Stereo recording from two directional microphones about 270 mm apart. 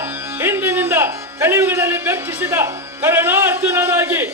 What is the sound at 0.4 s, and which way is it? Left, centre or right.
A man's voice, centre.